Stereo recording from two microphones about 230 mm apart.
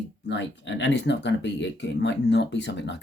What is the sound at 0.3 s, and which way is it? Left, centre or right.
Speech, left.